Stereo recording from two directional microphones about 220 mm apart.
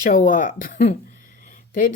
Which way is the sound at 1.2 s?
40° left (ahead or behind).